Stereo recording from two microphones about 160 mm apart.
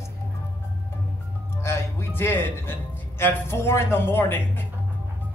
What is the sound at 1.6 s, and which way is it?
A man's voice, 15° left (ahead or behind).